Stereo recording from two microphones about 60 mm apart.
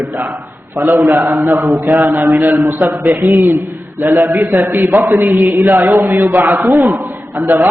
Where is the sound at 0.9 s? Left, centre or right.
Right.